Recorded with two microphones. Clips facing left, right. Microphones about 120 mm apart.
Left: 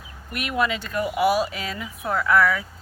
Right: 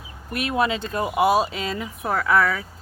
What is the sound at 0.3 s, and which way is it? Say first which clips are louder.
Speech: right 2 dB; 30° right (ahead or behind).